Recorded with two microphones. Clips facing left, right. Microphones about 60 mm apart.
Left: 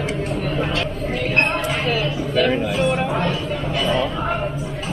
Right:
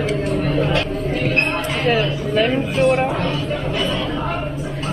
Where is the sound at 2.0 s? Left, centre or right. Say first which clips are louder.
Right 2 dB; right.